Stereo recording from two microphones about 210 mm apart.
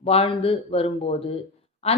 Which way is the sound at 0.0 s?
25° left (ahead or behind).